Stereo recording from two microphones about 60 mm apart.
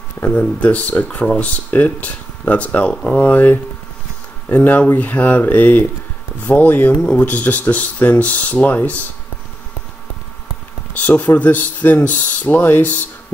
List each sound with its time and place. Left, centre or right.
0.2 s speech: left
11.0 s speech: left